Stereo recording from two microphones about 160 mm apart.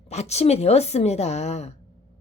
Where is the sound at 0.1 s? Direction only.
45° left (ahead or behind).